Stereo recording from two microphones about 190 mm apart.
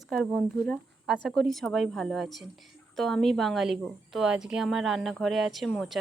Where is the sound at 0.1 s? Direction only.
5° left (ahead or behind).